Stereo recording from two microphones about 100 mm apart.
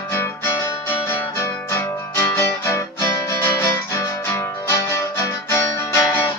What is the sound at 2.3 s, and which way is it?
Music, 25° left (ahead or behind).